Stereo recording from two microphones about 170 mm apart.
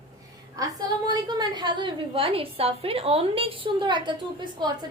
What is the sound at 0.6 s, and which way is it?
A woman's voice, 25° right (ahead or behind).